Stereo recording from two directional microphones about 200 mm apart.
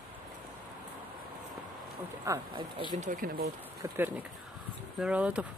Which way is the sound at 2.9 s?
40° right (ahead or behind).